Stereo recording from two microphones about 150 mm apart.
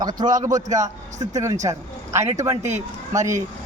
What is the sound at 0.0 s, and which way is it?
Speech, 25° right (ahead or behind).